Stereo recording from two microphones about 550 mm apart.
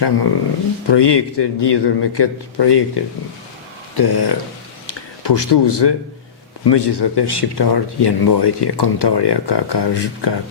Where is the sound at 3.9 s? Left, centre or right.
Left.